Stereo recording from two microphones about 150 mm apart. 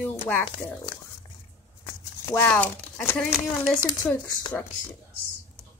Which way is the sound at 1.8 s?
20° left (ahead or behind).